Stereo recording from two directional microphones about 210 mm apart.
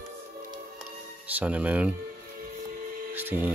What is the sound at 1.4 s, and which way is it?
Speech, 5° right (ahead or behind).